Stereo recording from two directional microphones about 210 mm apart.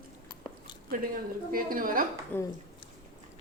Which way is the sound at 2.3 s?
10° left (ahead or behind).